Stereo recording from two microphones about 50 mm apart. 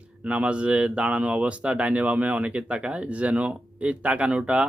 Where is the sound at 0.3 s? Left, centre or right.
Right.